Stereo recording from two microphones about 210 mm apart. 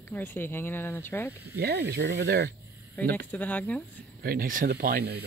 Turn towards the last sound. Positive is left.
turn(degrees=-50)  # may be behind; listen again after turning